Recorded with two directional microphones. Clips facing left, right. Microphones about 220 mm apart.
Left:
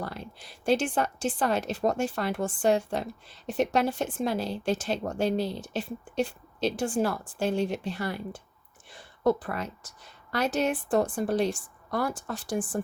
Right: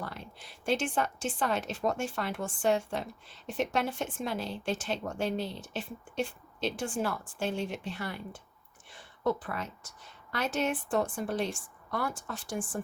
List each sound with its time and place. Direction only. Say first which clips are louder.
0.0 s a woman's voice: left 5 dB; 35° left (ahead or behind)